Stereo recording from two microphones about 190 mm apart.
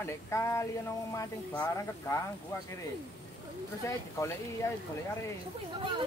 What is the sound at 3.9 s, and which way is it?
Speech, 15° left (ahead or behind).